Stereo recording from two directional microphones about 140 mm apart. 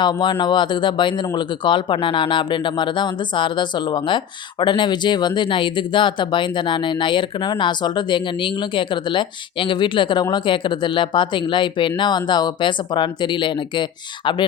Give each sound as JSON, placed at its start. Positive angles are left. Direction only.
{"t": 0.0, "sound": "speech", "side_deg": 30}